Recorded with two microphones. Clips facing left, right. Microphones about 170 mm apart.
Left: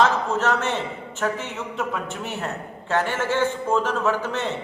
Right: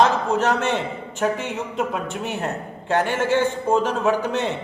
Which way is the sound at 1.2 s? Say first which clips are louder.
Right 3 dB; 15° right (ahead or behind).